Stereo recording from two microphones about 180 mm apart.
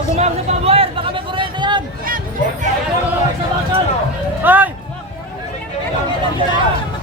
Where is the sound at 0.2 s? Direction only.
35° right (ahead or behind).